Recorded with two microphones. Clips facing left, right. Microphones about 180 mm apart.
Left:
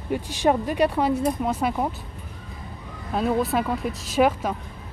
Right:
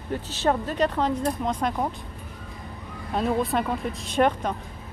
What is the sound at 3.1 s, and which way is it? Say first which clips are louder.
Speech: left 2 dB; centre (ahead or behind).